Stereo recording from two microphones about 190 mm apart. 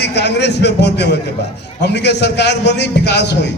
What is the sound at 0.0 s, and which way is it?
A man's voice, 60° left (ahead or behind).